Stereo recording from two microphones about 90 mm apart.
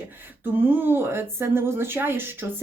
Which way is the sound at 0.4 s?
20° right (ahead or behind).